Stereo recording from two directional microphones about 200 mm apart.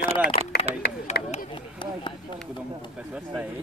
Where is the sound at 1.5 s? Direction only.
25° left (ahead or behind).